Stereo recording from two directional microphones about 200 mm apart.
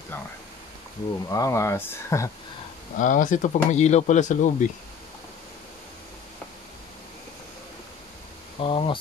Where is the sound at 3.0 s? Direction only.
40° left (ahead or behind).